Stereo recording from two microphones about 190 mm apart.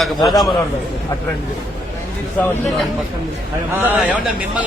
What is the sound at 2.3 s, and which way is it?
Speech, 10° left (ahead or behind).